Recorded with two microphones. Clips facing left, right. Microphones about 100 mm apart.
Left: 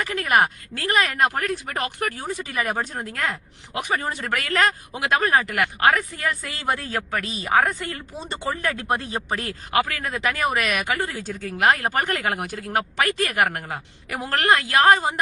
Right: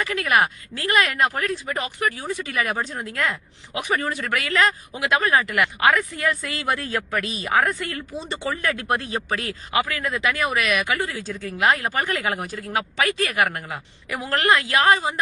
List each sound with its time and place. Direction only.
0.0 s speech: 35° left (ahead or behind)
1.6 s speech: 50° left (ahead or behind)
2.4 s speech: 35° left (ahead or behind)
9.1 s speech: 40° left (ahead or behind)